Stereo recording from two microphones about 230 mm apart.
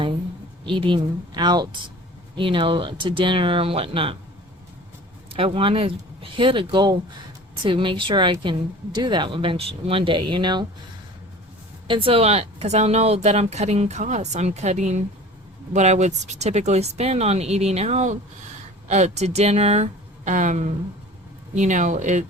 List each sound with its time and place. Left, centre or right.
0.6 s speech: right
5.3 s speech: right
11.9 s speech: right